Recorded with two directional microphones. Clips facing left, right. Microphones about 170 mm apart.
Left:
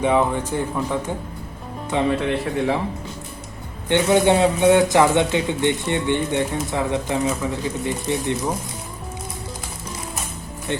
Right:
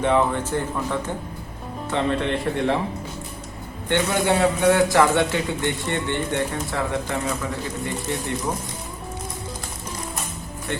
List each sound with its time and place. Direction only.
0.0 s speech: 10° left (ahead or behind)
3.8 s a man's voice: 20° left (ahead or behind)
10.7 s a man's voice: 20° left (ahead or behind)